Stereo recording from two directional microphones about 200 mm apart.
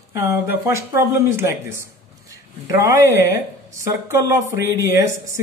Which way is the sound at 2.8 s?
15° right (ahead or behind).